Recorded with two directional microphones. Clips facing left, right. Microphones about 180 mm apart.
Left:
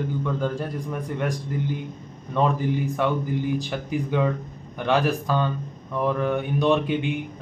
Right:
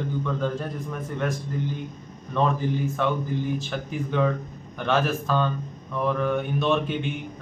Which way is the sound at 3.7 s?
10° left (ahead or behind).